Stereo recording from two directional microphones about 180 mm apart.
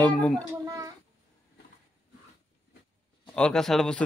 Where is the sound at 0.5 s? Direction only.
20° right (ahead or behind).